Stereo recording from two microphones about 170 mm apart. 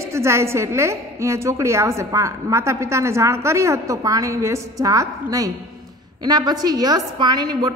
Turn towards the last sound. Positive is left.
turn(degrees=-25)  # may be behind; listen again after turning